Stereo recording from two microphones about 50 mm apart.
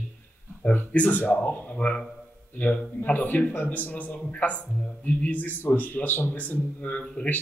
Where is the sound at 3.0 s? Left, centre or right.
Left.